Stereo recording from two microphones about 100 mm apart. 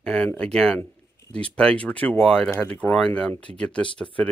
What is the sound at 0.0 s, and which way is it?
Speech, 10° left (ahead or behind).